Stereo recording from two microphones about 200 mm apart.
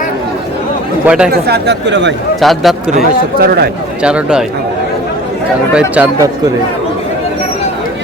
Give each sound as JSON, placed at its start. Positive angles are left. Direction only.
{"t": 1.0, "sound": "speech", "side_deg": -5}
{"t": 1.3, "sound": "speech", "side_deg": -55}
{"t": 2.4, "sound": "speech", "side_deg": 0}
{"t": 3.4, "sound": "a man's voice", "side_deg": -50}
{"t": 4.0, "sound": "speech", "side_deg": -5}
{"t": 5.7, "sound": "speech", "side_deg": -5}